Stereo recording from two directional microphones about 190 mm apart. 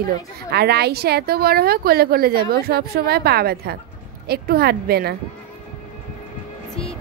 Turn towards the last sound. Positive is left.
turn(degrees=-55)  # may be behind; listen again after turning